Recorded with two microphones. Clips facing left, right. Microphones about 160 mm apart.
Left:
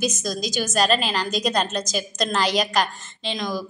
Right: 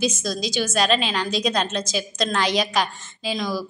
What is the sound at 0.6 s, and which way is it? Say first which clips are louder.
A woman's voice: even; centre (ahead or behind).